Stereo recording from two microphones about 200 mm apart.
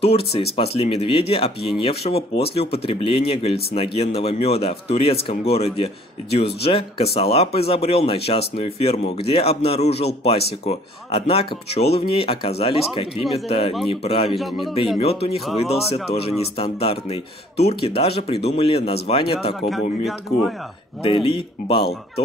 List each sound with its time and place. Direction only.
0.1 s speech: 30° left (ahead or behind)
19.7 s speech: centre (ahead or behind)
21.0 s speech: 25° left (ahead or behind)